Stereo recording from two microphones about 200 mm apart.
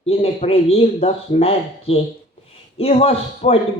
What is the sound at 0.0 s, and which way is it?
A man's voice, 30° left (ahead or behind).